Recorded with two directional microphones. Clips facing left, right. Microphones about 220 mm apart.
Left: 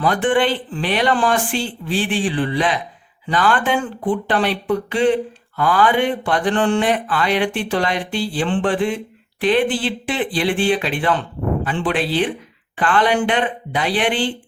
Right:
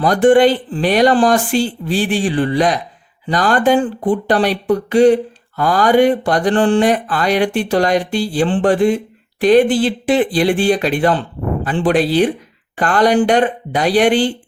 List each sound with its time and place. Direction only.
0.0 s speech: 40° right (ahead or behind)